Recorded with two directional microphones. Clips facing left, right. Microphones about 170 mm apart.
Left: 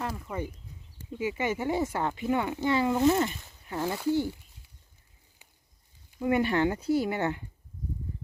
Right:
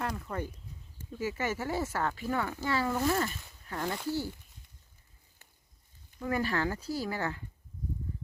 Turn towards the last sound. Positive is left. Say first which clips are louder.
# left 7 dB
turn(degrees=20)  # may be behind; listen again after turning